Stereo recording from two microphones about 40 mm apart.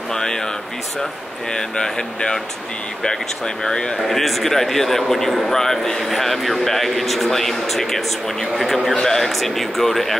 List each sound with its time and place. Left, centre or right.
0.1 s a man's voice: centre
1.5 s a man's voice: centre
4.1 s a man's voice: centre